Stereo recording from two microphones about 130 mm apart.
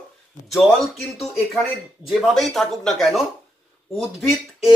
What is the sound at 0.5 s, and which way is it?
Speech, centre (ahead or behind).